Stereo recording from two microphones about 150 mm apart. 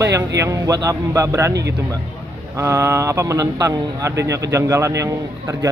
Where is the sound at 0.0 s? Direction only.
20° right (ahead or behind).